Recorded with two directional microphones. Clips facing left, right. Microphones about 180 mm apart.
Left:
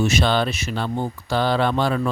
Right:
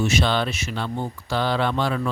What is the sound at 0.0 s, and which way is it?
Speech, 40° left (ahead or behind).